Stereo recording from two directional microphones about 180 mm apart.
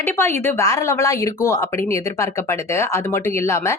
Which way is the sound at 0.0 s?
15° left (ahead or behind).